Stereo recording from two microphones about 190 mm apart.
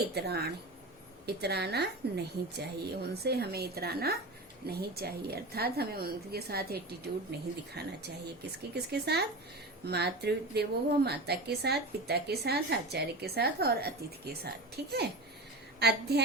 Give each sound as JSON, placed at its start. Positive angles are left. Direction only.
{"t": 0.1, "sound": "speech", "side_deg": -60}